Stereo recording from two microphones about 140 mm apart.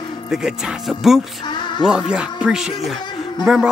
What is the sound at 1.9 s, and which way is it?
Speech, 5° right (ahead or behind).